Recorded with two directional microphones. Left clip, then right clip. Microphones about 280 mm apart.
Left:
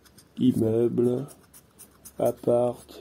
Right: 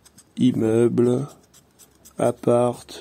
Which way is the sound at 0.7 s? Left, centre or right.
Right.